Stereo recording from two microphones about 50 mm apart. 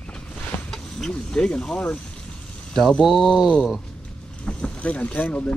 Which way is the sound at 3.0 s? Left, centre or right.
Centre.